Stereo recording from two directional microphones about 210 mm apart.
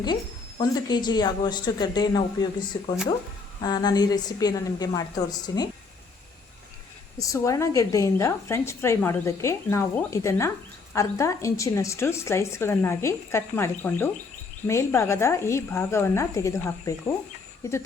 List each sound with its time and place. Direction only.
0.6 s speech: 20° left (ahead or behind)
7.2 s a woman's voice: 15° left (ahead or behind)